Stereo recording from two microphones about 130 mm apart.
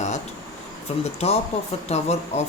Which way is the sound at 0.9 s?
55° left (ahead or behind).